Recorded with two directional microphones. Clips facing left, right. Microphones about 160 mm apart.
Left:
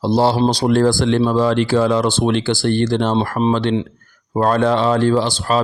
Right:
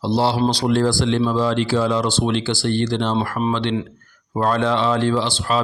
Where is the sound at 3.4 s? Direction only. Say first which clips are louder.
Left 6 dB; 25° left (ahead or behind).